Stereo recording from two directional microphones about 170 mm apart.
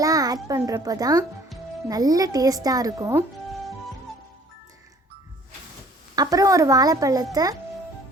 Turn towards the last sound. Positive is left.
turn(degrees=-20)  # may be behind; listen again after turning